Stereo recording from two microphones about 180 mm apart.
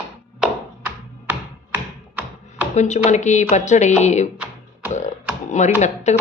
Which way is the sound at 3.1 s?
40° left (ahead or behind).